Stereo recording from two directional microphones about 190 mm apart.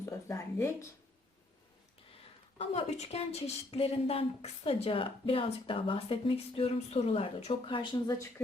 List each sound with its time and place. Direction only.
0.0 s speech: 15° left (ahead or behind)
2.6 s a woman's voice: 35° left (ahead or behind)